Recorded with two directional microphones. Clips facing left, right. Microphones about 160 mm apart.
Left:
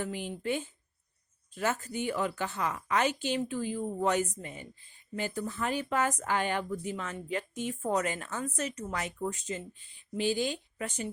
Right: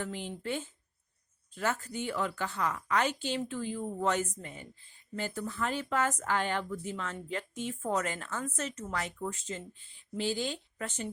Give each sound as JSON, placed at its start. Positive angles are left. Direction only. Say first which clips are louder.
{"t": 0.0, "sound": "speech", "louder": "left 3 dB", "side_deg": 15}